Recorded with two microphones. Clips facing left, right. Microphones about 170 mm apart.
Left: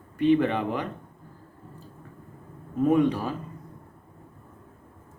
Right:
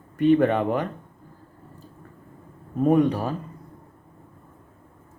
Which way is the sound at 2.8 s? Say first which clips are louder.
Right 2 dB; 40° right (ahead or behind).